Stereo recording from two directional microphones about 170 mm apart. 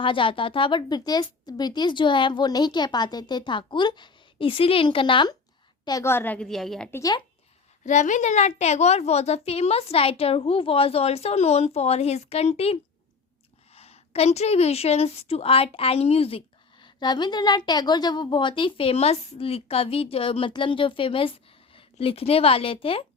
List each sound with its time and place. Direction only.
0.0 s a woman's voice: 30° left (ahead or behind)
5.8 s a woman's voice: 20° left (ahead or behind)
7.9 s a woman's voice: 45° left (ahead or behind)